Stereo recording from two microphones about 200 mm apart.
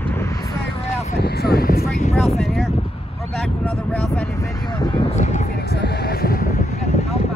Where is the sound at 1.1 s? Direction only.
55° left (ahead or behind).